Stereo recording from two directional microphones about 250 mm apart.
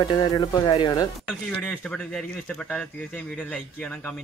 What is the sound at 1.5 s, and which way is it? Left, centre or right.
Speech, centre.